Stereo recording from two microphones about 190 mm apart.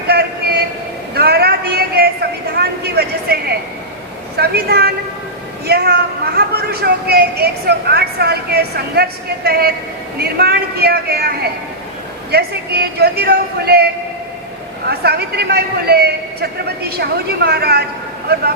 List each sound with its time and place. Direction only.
0.1 s train: 60° right (ahead or behind)
1.1 s a sound: 55° right (ahead or behind)
5.6 s a man's voice: 55° right (ahead or behind)